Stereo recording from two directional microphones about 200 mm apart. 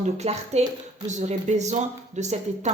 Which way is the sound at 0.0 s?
35° right (ahead or behind).